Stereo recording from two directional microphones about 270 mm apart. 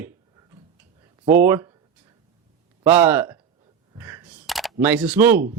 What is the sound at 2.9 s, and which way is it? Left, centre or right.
Speech, centre.